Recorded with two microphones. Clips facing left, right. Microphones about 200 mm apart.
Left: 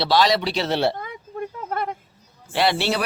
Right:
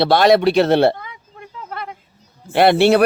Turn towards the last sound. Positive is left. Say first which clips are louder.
# right 9 dB
turn(degrees=-55)  # may be behind; listen again after turning